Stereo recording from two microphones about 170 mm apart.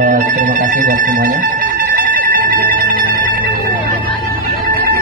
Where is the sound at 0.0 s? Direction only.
55° right (ahead or behind).